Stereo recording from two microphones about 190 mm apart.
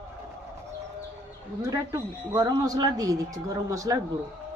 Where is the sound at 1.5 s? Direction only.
20° right (ahead or behind).